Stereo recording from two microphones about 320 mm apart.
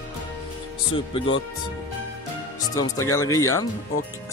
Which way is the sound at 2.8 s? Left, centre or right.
Centre.